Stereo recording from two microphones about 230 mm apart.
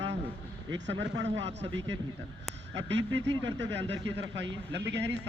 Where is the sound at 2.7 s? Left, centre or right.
Right.